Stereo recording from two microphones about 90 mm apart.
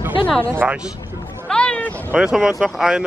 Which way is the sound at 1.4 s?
10° left (ahead or behind).